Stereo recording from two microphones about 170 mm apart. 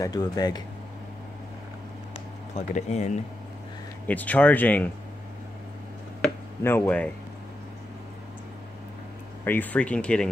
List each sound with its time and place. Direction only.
0.0 s speech: 25° left (ahead or behind)
2.1 s a sound: 40° left (ahead or behind)
4.1 s speech: 10° left (ahead or behind)
6.6 s speech: 15° left (ahead or behind)
9.4 s speech: 10° left (ahead or behind)